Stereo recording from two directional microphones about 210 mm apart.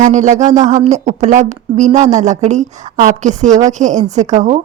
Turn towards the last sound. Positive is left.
turn(degrees=-35)  # may be behind; listen again after turning